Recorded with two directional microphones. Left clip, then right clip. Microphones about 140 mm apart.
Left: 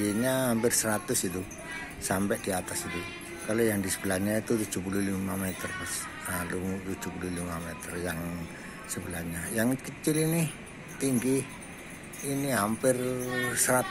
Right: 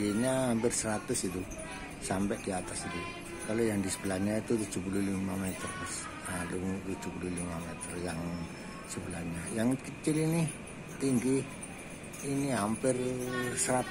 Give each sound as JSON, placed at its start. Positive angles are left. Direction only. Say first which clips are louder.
{"t": 0.0, "sound": "speech", "louder": "left 3 dB", "side_deg": 20}
{"t": 9.6, "sound": "speech", "louder": "left 3 dB", "side_deg": 15}